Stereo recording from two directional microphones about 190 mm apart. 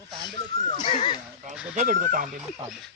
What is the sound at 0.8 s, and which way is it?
Neigh, 25° left (ahead or behind).